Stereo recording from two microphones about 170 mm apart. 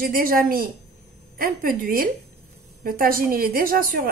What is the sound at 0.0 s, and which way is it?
Speech, 55° right (ahead or behind).